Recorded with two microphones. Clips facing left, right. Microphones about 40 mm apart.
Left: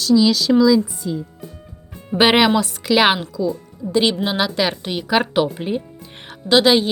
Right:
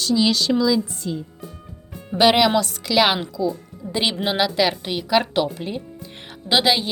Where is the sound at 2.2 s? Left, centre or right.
Left.